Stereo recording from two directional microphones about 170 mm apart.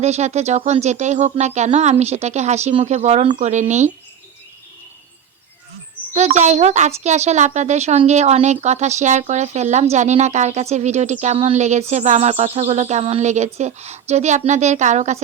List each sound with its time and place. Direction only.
0.0 s speech: 40° right (ahead or behind)
6.1 s speech: 40° right (ahead or behind)